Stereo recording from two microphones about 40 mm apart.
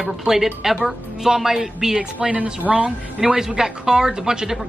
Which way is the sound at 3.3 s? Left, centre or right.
Centre.